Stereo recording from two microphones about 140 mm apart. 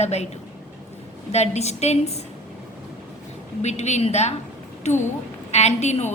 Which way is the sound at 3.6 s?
55° left (ahead or behind).